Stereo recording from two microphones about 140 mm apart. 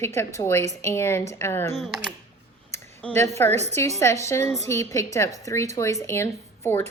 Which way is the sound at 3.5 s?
50° right (ahead or behind).